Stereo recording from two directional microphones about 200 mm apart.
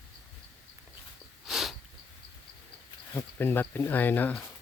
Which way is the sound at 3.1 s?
10° left (ahead or behind).